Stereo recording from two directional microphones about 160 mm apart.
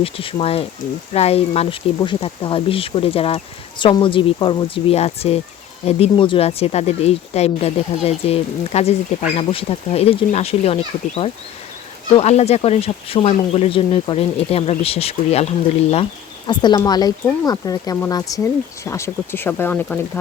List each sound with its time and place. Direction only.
0.0 s speech: 35° left (ahead or behind)
16.5 s speech: 30° left (ahead or behind); by 20.0 s 10° left (ahead or behind)